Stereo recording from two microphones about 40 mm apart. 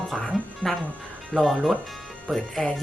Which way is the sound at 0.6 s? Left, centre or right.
Left.